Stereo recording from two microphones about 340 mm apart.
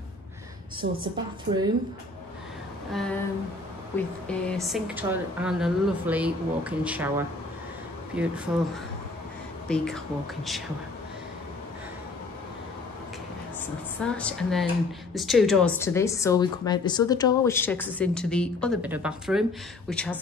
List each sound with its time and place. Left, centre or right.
0.8 s a woman's voice: right
2.9 s a woman's voice: centre
9.7 s a woman's voice: centre
14.0 s a woman's voice: centre